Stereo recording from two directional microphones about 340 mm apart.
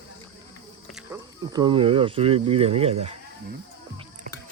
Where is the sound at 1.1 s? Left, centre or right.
Centre.